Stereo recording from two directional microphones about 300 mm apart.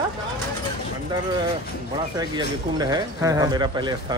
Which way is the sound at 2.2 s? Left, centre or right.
Centre.